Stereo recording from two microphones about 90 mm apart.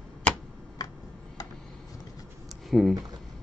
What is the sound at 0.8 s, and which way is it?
Tick-tock, 45° left (ahead or behind).